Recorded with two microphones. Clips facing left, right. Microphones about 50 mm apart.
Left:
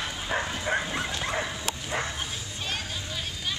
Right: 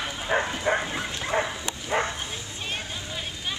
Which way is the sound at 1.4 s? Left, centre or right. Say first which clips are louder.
Right 3 dB; centre.